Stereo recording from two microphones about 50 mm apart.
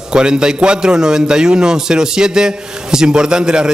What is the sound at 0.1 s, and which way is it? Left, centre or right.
Speech, centre.